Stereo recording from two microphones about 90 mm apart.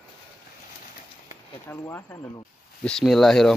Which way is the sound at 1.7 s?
25° left (ahead or behind).